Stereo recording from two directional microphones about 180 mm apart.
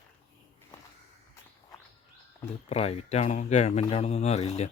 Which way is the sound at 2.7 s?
35° left (ahead or behind).